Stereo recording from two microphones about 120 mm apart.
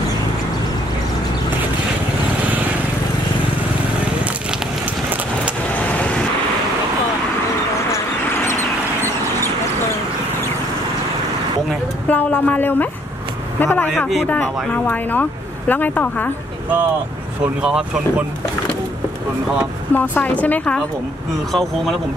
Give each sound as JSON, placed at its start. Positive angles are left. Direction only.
{"t": 4.0, "sound": "a sound", "side_deg": -10}
{"t": 12.1, "sound": "speech", "side_deg": 15}
{"t": 13.9, "sound": "speech", "side_deg": 5}
{"t": 14.7, "sound": "speech", "side_deg": 15}
{"t": 17.6, "sound": "speech", "side_deg": -5}
{"t": 19.9, "sound": "speech", "side_deg": 15}